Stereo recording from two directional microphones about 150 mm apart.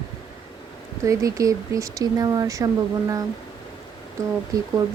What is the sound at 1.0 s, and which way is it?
Speech, 20° right (ahead or behind).